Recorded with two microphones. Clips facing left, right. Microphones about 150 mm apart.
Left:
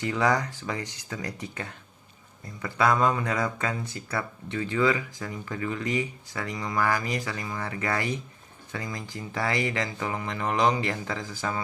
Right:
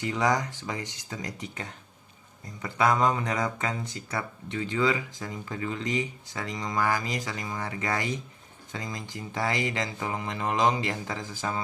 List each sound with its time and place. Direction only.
0.0 s speech: 20° right (ahead or behind)